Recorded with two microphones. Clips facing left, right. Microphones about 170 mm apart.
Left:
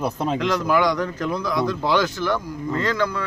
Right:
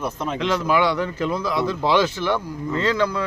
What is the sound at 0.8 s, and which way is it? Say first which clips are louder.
Speech: even; 10° right (ahead or behind).